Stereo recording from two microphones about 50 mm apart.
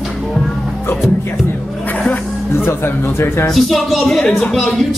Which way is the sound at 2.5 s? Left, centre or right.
Left.